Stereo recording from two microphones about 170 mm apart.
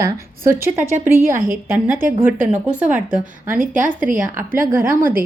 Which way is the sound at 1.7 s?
15° right (ahead or behind).